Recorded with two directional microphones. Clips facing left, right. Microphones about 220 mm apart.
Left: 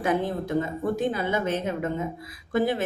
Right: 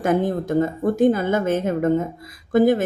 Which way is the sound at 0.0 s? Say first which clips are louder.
Right 5 dB; 45° right (ahead or behind).